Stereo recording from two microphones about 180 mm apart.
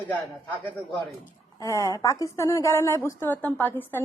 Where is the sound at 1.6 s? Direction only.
20° left (ahead or behind).